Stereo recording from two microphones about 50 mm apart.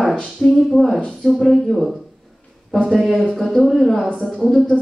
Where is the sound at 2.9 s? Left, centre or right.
Centre.